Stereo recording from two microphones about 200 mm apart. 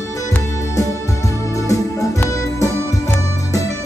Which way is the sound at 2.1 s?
15° left (ahead or behind).